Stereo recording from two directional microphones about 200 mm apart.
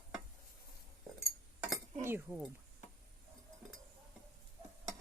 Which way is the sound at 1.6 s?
10° right (ahead or behind).